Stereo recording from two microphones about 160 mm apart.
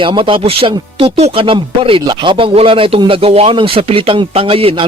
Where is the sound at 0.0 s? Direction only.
30° right (ahead or behind).